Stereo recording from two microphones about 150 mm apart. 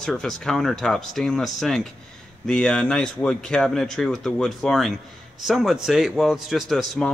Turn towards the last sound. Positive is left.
turn(degrees=0)  # may be behind; listen again after turning